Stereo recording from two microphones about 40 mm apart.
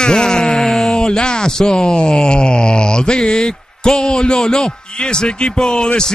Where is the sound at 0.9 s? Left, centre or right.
Centre.